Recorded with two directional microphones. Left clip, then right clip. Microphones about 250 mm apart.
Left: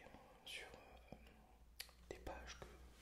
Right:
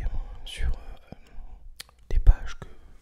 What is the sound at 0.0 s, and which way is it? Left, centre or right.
Whispering, right.